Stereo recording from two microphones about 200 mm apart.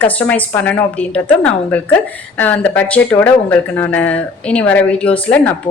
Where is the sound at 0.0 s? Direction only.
5° left (ahead or behind).